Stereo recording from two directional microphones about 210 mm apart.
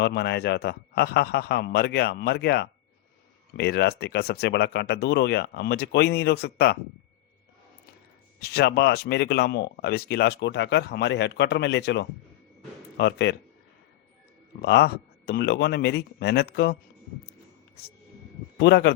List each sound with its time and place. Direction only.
0.0 s speech: 55° left (ahead or behind)
8.4 s speech: 50° left (ahead or behind)
14.6 s speech: 50° left (ahead or behind)
18.6 s speech: 50° left (ahead or behind)